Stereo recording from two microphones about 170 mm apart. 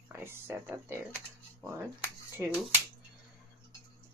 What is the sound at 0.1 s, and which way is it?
Speech, 15° right (ahead or behind).